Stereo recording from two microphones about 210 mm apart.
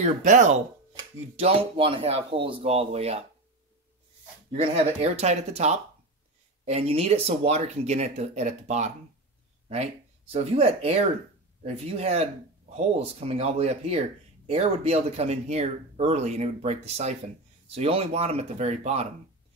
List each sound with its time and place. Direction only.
0.0 s speech: 35° right (ahead or behind)
4.6 s speech: 30° right (ahead or behind)
10.3 s speech: 30° right (ahead or behind)